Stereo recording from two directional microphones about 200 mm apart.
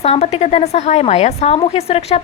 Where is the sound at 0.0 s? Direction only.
30° left (ahead or behind).